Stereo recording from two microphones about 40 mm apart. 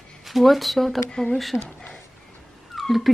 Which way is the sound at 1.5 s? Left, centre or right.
Centre.